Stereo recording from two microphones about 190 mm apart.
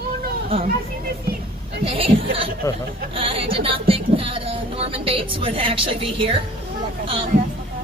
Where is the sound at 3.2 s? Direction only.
30° right (ahead or behind).